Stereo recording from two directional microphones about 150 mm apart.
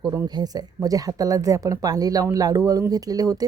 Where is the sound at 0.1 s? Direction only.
20° right (ahead or behind).